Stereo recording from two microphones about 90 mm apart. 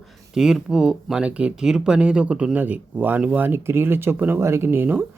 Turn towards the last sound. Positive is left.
turn(degrees=-25)  # may be behind; listen again after turning